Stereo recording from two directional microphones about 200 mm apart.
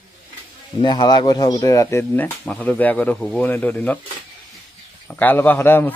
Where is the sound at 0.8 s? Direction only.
20° left (ahead or behind).